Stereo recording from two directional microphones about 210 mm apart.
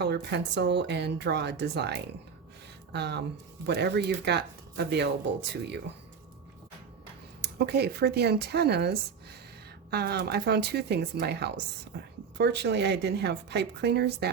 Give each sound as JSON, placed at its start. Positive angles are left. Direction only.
{"t": 0.0, "sound": "speech", "side_deg": -55}
{"t": 7.4, "sound": "speech", "side_deg": -50}